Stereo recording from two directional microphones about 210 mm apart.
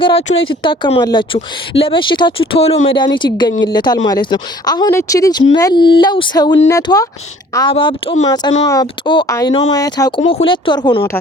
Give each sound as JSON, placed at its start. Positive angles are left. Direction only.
{"t": 0.0, "sound": "speech", "side_deg": 25}
{"t": 10.2, "sound": "speech", "side_deg": 30}